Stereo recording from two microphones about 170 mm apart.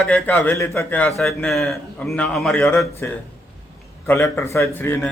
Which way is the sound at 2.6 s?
15° left (ahead or behind).